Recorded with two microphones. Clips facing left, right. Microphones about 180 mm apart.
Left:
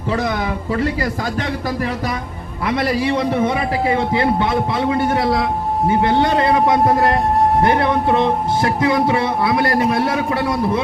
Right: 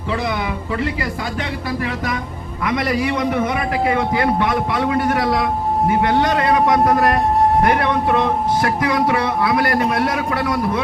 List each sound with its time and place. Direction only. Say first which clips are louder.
1.4 s a man's voice: left 2 dB; 40° left (ahead or behind)